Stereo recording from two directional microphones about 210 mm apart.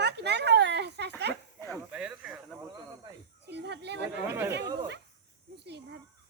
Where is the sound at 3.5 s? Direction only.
55° right (ahead or behind).